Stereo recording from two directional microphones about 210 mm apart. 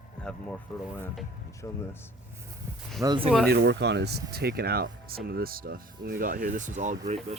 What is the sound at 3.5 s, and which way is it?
Speech, 55° right (ahead or behind).